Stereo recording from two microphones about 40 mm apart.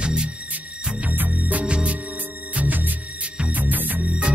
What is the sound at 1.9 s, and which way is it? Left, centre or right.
Music, right.